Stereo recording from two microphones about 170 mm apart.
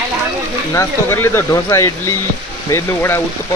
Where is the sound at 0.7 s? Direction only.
15° left (ahead or behind).